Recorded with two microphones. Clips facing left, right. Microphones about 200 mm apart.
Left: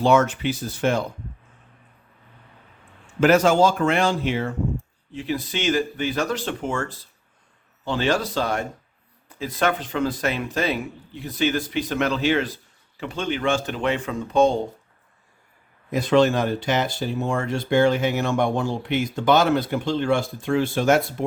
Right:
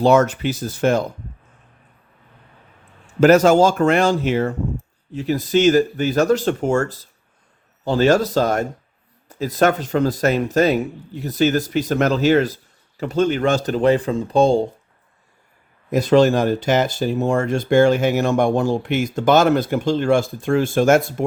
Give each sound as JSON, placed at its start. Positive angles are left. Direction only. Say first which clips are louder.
{"t": 0.0, "sound": "speech", "louder": "right 4 dB", "side_deg": -40}
{"t": 3.2, "sound": "speech", "louder": "right 5 dB", "side_deg": -40}
{"t": 15.9, "sound": "speech", "louder": "right 4 dB", "side_deg": -40}